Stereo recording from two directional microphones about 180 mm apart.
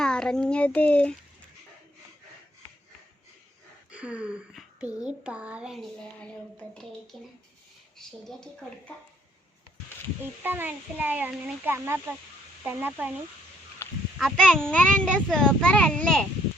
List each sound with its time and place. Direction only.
0.0 s a child's voice: 5° left (ahead or behind)
3.9 s a child's voice: 5° right (ahead or behind)
7.9 s a child's voice: 5° left (ahead or behind)
10.4 s speech: 10° right (ahead or behind)
13.8 s a sound: 10° left (ahead or behind)
14.2 s a child's voice: centre (ahead or behind)